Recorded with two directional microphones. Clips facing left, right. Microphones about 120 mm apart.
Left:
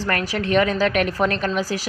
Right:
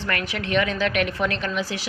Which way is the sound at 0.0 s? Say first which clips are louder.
Left 4 dB; 35° left (ahead or behind).